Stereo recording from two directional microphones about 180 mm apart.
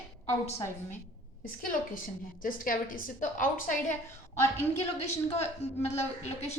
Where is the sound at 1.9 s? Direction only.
50° left (ahead or behind).